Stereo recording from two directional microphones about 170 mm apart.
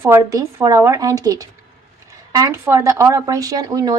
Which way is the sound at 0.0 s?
15° right (ahead or behind).